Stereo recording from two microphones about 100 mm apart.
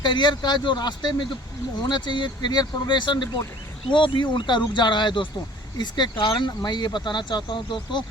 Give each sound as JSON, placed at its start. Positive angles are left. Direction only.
{"t": 0.0, "sound": "speech", "side_deg": 50}